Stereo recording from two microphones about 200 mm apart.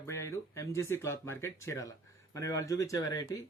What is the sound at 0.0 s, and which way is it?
Speech, 15° left (ahead or behind).